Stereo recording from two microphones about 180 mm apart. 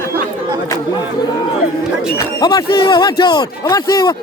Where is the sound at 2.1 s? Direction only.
20° left (ahead or behind).